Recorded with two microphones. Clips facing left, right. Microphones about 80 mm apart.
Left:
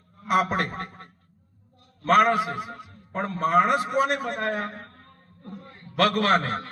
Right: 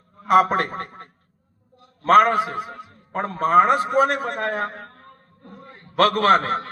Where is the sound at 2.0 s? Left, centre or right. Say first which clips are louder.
Right 4 dB; right.